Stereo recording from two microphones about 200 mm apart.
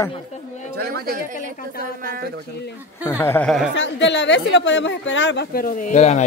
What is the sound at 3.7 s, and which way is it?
Speech, 60° left (ahead or behind).